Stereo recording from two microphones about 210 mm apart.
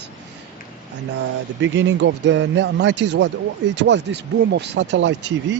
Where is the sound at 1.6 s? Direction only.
60° right (ahead or behind).